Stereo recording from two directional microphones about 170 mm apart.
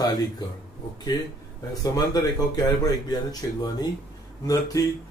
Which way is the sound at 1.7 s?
20° left (ahead or behind).